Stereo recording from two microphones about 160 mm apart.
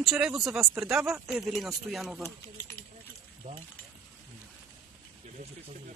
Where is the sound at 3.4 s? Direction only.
50° right (ahead or behind).